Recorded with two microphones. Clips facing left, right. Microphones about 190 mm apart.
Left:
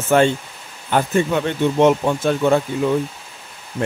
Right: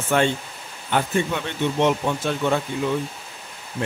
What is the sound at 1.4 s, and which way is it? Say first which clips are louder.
Speech: left 7 dB; 45° left (ahead or behind).